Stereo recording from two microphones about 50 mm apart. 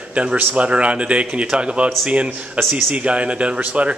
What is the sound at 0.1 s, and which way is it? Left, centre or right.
Speech, right.